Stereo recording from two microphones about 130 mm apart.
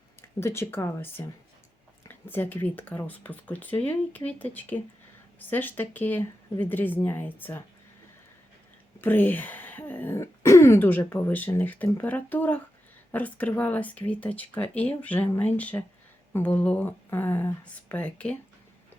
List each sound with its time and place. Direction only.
0.2 s speech: 20° left (ahead or behind)
9.0 s speech: 15° left (ahead or behind)